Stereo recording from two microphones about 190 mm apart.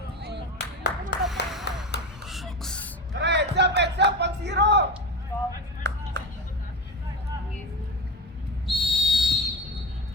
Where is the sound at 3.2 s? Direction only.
65° right (ahead or behind).